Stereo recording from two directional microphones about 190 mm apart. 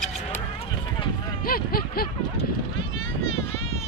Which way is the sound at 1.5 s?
50° left (ahead or behind).